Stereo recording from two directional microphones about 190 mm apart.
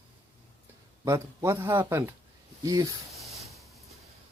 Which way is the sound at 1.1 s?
15° right (ahead or behind).